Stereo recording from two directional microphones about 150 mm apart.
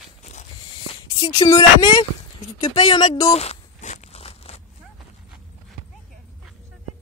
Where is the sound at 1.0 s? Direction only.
25° left (ahead or behind).